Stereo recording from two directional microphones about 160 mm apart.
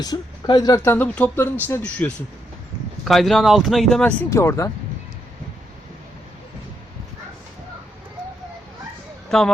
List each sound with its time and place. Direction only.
0.0 s speech: 25° left (ahead or behind); by 4.1 s centre (ahead or behind)
4.3 s speech: 15° left (ahead or behind)
9.3 s speech: 5° left (ahead or behind)